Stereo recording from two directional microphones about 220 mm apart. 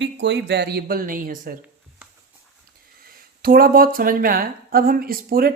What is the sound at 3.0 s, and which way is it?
Speech, 40° right (ahead or behind).